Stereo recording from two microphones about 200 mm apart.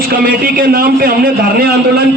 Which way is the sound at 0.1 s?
45° right (ahead or behind).